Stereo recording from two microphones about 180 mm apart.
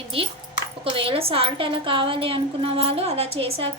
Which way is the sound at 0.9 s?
30° right (ahead or behind).